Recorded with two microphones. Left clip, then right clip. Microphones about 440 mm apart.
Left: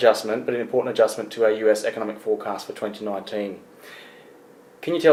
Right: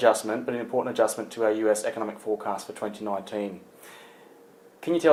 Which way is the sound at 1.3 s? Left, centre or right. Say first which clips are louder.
Left 4 dB; right.